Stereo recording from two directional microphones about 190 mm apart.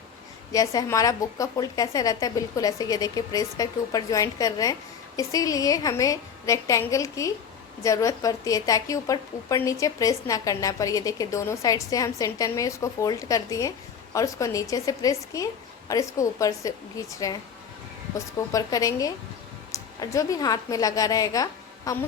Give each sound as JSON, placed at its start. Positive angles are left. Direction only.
{"t": 0.5, "sound": "a woman's voice", "side_deg": 20}
{"t": 18.3, "sound": "a woman's voice", "side_deg": 20}